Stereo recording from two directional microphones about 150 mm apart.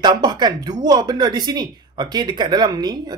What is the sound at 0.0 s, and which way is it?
Speech, 30° right (ahead or behind).